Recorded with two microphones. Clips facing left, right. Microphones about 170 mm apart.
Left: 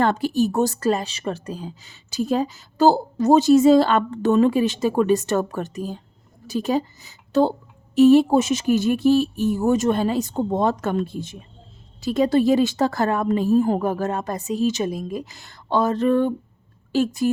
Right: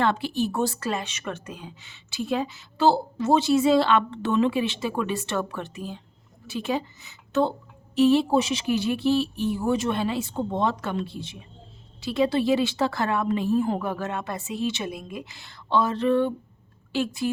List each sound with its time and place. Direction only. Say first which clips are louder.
0.0 s a woman's voice: left 5 dB; 45° left (ahead or behind)